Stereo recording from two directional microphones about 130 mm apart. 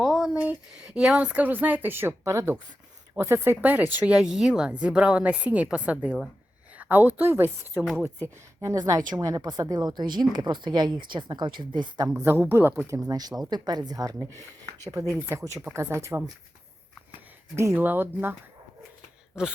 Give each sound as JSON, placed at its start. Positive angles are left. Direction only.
{"t": 0.0, "sound": "a sound", "side_deg": 0}
{"t": 0.9, "sound": "a woman's voice", "side_deg": -5}
{"t": 6.7, "sound": "a sound", "side_deg": -10}
{"t": 7.1, "sound": "a woman's voice", "side_deg": -15}
{"t": 8.6, "sound": "speech", "side_deg": -30}
{"t": 12.0, "sound": "a woman's voice", "side_deg": -20}
{"t": 13.1, "sound": "speech", "side_deg": -30}
{"t": 17.6, "sound": "a woman's voice", "side_deg": -15}